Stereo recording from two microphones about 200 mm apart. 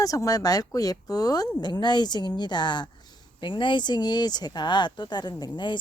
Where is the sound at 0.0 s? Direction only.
15° left (ahead or behind).